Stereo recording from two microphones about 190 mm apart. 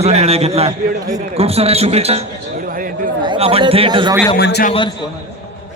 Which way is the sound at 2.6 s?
50° right (ahead or behind).